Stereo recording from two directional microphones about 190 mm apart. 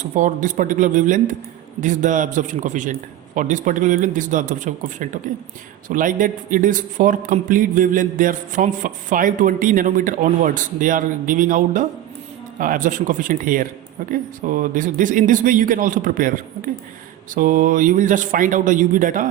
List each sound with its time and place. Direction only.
0.0 s a man's voice: 40° right (ahead or behind)